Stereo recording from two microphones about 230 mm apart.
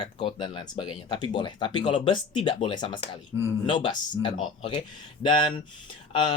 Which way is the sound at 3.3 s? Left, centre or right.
Centre.